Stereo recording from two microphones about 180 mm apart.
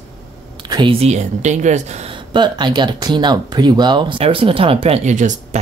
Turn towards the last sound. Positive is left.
turn(degrees=-45)  # may be behind; listen again after turning